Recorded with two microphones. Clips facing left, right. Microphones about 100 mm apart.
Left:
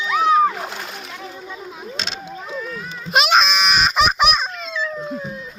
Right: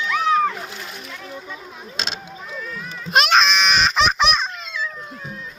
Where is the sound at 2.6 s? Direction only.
5° left (ahead or behind).